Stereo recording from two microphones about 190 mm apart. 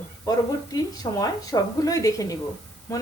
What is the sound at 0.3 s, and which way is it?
A woman's voice, 20° left (ahead or behind).